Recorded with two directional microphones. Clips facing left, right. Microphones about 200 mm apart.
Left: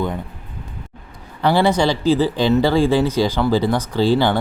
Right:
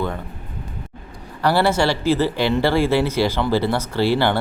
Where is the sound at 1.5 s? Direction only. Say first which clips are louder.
Left 2 dB; 15° left (ahead or behind).